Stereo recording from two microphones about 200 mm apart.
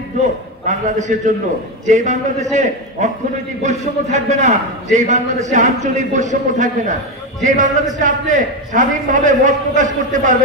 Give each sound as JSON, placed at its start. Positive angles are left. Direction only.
{"t": 0.7, "sound": "a man's voice", "side_deg": -35}
{"t": 3.6, "sound": "a man's voice", "side_deg": -35}